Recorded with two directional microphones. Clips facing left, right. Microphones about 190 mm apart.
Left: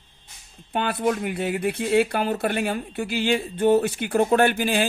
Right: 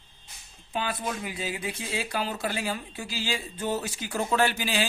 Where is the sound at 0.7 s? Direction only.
60° left (ahead or behind).